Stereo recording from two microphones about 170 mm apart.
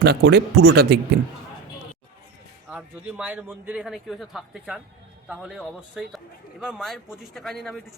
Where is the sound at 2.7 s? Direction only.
10° right (ahead or behind).